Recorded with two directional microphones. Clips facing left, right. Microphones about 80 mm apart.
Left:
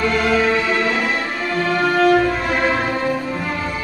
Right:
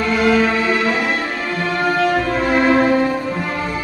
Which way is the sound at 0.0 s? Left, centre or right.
Centre.